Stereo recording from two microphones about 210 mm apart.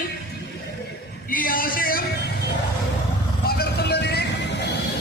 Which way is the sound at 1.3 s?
40° left (ahead or behind).